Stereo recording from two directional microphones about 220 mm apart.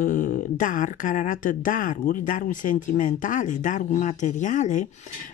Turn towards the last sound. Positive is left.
turn(degrees=35)  # may be behind; listen again after turning